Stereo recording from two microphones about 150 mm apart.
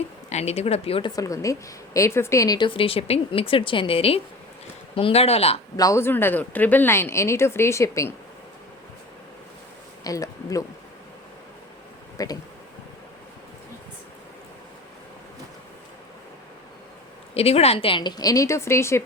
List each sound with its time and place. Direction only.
0.3 s speech: 45° left (ahead or behind)
1.1 s a woman's voice: 20° left (ahead or behind); by 5.5 s 40° left (ahead or behind)
5.7 s speech: 20° left (ahead or behind)
10.0 s a sound: 20° left (ahead or behind)
12.1 s speech: 25° left (ahead or behind)
17.3 s a woman's voice: 45° left (ahead or behind); by 19.0 s 20° left (ahead or behind)